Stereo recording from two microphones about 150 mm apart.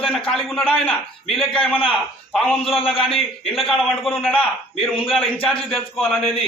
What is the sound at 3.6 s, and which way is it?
Speech, centre (ahead or behind).